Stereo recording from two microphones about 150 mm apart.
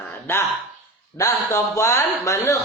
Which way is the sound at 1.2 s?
20° left (ahead or behind).